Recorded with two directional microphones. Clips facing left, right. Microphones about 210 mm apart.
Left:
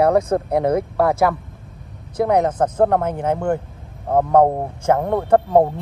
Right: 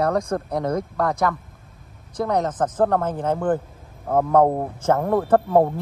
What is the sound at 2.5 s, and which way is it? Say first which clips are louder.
Speech: left 3 dB; 30° left (ahead or behind).